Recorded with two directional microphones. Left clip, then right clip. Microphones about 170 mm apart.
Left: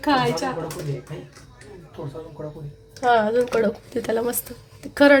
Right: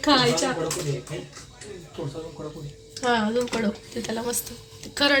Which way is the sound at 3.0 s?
55° left (ahead or behind).